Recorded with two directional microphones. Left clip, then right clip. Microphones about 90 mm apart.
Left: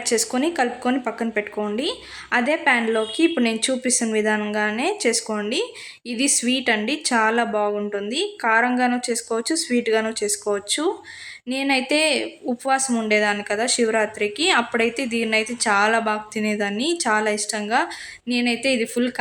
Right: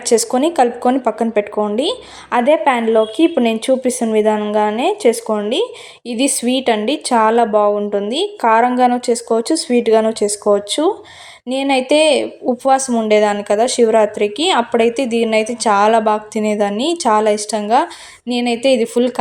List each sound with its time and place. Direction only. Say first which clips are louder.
0.0 s a woman's voice: right 8 dB; 30° right (ahead or behind)